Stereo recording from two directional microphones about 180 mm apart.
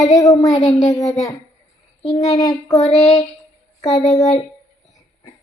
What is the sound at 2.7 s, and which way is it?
Child singing, 40° left (ahead or behind).